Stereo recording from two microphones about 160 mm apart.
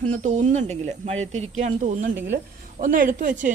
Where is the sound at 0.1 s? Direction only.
50° right (ahead or behind).